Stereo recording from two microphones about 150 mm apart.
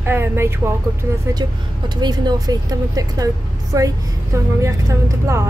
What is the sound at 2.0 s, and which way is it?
Speech, 30° right (ahead or behind).